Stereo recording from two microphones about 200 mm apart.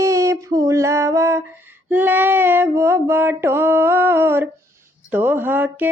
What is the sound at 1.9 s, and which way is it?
Female singing, 10° right (ahead or behind).